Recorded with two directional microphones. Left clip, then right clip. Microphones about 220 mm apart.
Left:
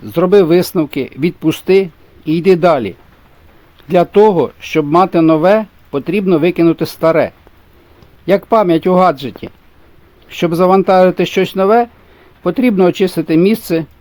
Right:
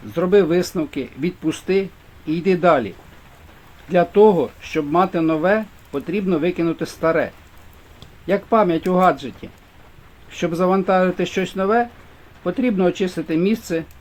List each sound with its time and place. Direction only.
0.1 s speech: 45° left (ahead or behind)
8.3 s speech: 45° left (ahead or behind)